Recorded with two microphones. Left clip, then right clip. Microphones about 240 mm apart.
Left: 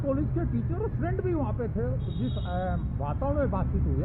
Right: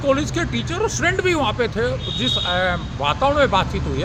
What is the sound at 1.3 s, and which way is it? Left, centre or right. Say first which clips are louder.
Speech: right 12 dB; right.